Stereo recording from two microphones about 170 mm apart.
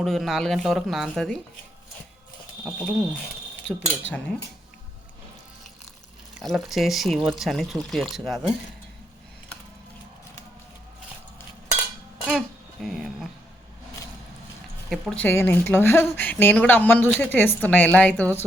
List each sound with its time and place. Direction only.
0.0 s speech: centre (ahead or behind)
2.6 s speech: centre (ahead or behind)
3.7 s cutlery: 90° left
6.4 s speech: centre (ahead or behind)
12.2 s speech: centre (ahead or behind)
14.8 s a woman's voice: centre (ahead or behind)